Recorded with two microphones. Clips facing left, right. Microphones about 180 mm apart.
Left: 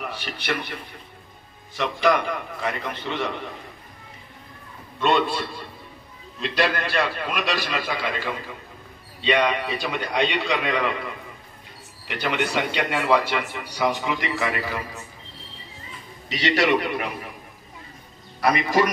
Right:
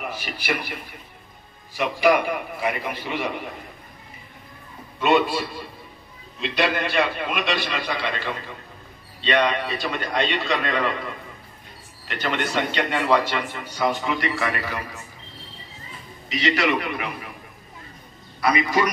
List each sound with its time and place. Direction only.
0.0 s a man's voice: 5° right (ahead or behind)
1.8 s a man's voice: 10° right (ahead or behind)
5.0 s a man's voice: 5° right (ahead or behind); by 14.5 s 20° left (ahead or behind)
16.3 s a man's voice: 40° left (ahead or behind)